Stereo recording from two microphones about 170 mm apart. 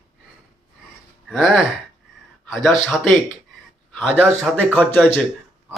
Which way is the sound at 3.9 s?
5° left (ahead or behind).